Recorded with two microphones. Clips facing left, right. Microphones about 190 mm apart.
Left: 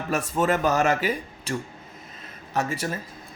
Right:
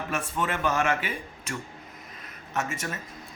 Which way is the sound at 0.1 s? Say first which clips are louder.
Left 8 dB; 40° left (ahead or behind).